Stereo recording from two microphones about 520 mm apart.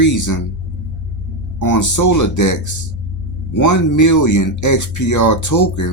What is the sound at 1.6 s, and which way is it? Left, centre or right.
Speech, left.